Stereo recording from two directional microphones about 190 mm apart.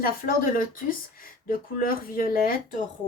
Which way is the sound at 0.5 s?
45° left (ahead or behind).